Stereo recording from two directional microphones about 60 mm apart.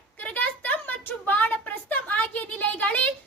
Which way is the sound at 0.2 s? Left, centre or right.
Left.